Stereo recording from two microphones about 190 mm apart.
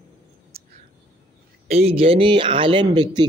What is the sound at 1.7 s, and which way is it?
Speech, 30° right (ahead or behind).